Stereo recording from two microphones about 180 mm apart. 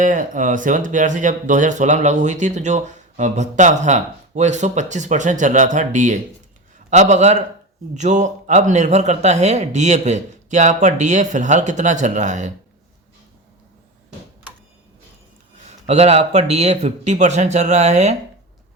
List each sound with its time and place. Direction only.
0.0 s speech: 45° right (ahead or behind)
15.9 s speech: 35° right (ahead or behind)